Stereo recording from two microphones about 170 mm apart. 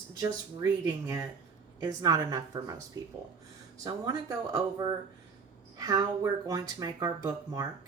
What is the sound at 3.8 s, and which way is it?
Speech, 20° right (ahead or behind).